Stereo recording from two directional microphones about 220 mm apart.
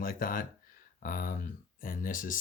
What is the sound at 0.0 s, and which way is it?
Speech, 40° left (ahead or behind).